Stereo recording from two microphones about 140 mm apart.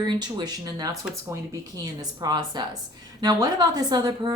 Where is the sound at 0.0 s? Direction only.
30° right (ahead or behind).